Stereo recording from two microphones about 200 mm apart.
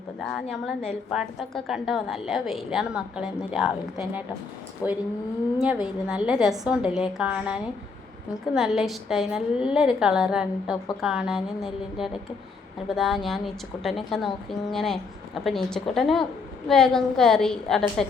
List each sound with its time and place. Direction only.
0.8 s a woman's voice: centre (ahead or behind)
4.8 s speech: 20° left (ahead or behind)
5.5 s a woman's voice: 5° right (ahead or behind)